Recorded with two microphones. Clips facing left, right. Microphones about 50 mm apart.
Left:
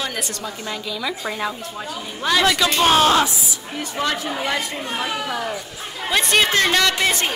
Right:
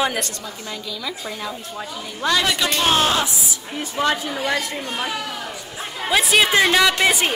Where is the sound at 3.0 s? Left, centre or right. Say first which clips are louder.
Left 4 dB; left.